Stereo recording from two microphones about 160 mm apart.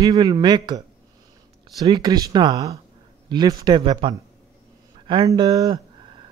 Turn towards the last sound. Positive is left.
turn(degrees=-25)  # may be behind; listen again after turning